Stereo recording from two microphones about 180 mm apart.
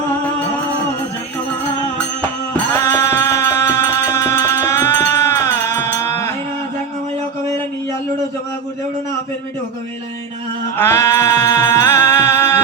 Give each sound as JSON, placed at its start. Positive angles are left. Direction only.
{"t": 2.7, "sound": "music", "side_deg": 15}
{"t": 10.8, "sound": "music", "side_deg": 15}